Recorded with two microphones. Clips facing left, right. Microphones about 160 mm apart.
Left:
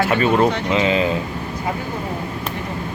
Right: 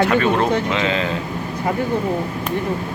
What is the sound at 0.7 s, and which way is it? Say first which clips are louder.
Speech: left 3 dB; 5° left (ahead or behind).